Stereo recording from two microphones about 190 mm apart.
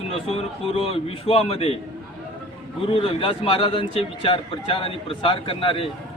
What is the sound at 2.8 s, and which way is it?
A man's voice, 30° left (ahead or behind).